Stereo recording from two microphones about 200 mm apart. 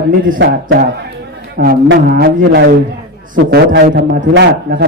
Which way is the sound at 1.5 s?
50° right (ahead or behind).